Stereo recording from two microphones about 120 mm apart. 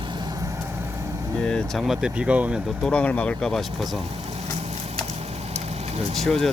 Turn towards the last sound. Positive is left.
turn(degrees=5)  # may be behind; listen again after turning